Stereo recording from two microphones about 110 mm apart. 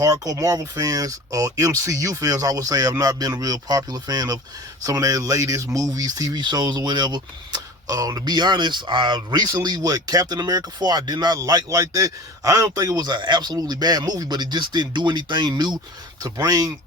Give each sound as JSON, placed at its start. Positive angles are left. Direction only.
{"t": 0.0, "sound": "speech", "side_deg": -35}